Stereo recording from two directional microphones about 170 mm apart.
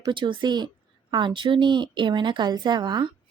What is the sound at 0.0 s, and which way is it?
A woman's voice, 30° right (ahead or behind).